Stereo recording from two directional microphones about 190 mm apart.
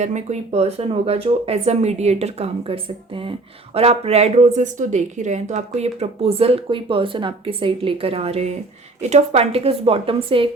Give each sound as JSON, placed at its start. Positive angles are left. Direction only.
{"t": 0.0, "sound": "speech", "side_deg": -40}